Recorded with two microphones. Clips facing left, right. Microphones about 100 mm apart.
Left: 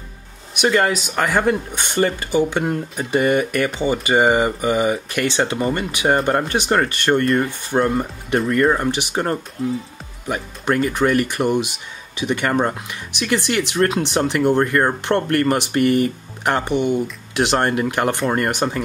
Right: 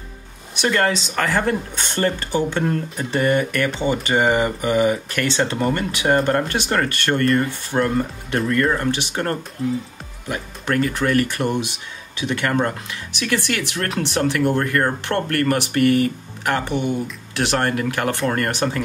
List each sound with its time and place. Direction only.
0.6 s speech: 10° left (ahead or behind)